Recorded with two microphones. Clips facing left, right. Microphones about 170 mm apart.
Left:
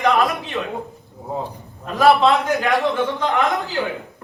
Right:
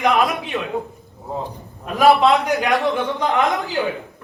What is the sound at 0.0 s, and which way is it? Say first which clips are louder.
Speech: even; 15° right (ahead or behind).